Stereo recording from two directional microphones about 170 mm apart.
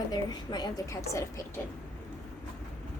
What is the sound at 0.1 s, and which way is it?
A woman's voice, 25° left (ahead or behind).